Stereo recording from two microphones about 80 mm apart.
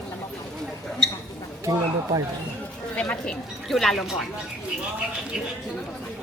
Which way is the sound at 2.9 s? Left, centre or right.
Centre.